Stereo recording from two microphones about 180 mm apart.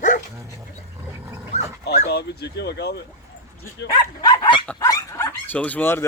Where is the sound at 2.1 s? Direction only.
65° left (ahead or behind).